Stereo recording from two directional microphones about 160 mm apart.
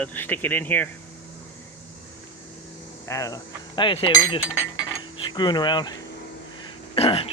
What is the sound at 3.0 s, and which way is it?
Cutlery, 20° left (ahead or behind).